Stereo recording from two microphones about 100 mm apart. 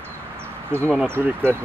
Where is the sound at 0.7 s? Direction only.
25° right (ahead or behind).